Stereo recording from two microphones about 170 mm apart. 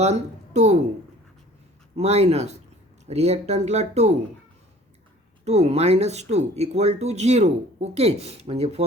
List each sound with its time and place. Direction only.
0.0 s speech: 40° right (ahead or behind)
2.0 s speech: 40° right (ahead or behind)
5.5 s speech: 40° right (ahead or behind)